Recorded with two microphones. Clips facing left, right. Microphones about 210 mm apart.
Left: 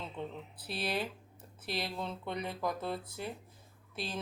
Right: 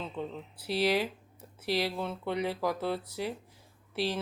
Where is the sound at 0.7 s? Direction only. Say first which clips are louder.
Right 8 dB; 75° right (ahead or behind).